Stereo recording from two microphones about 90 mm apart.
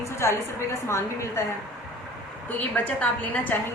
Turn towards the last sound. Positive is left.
turn(degrees=20)  # may be behind; listen again after turning